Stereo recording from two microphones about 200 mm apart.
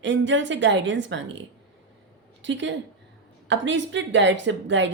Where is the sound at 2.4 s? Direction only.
65° right (ahead or behind).